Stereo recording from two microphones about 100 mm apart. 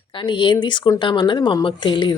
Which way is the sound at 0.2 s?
55° left (ahead or behind).